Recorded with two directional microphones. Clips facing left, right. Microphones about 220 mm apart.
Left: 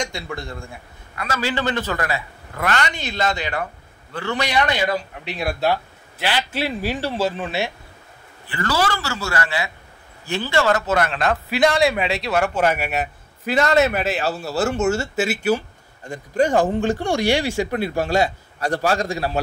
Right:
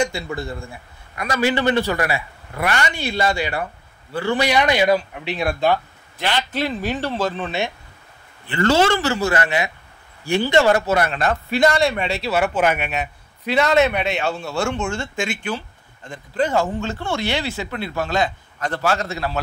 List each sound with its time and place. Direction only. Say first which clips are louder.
0.0 s a man's voice: right 5 dB; 5° right (ahead or behind)
1.1 s a man's voice: right 4 dB; 15° right (ahead or behind)
5.4 s speech: right 2 dB; 5° left (ahead or behind)
8.5 s a man's voice: right 6 dB; 25° right (ahead or behind); by 15.4 s 5° left (ahead or behind)
16.7 s speech: left 5 dB; 15° left (ahead or behind)
17.6 s speech: left 5 dB; 45° left (ahead or behind)
19.1 s a man's voice: left 2 dB; 35° left (ahead or behind)